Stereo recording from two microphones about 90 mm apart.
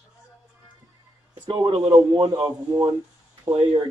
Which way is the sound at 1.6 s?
45° right (ahead or behind).